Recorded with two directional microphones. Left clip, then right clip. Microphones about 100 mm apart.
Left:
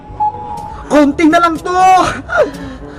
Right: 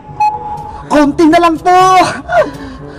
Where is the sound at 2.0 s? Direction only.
15° left (ahead or behind).